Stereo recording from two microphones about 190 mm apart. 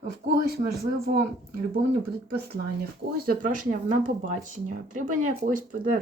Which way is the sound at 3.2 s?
50° right (ahead or behind).